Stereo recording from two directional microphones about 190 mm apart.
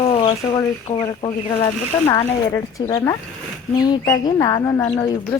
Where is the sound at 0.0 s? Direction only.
25° left (ahead or behind).